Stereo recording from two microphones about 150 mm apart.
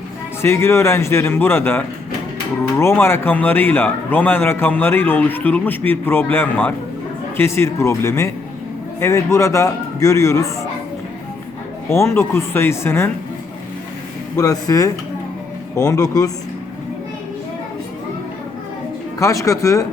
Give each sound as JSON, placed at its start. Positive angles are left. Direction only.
{"t": 0.4, "sound": "a man's voice", "side_deg": 15}
{"t": 11.9, "sound": "a man's voice", "side_deg": 20}
{"t": 14.3, "sound": "speech", "side_deg": 25}
{"t": 19.2, "sound": "speech", "side_deg": 20}